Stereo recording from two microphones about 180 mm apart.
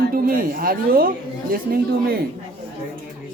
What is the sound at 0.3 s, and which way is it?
Speech, 50° right (ahead or behind).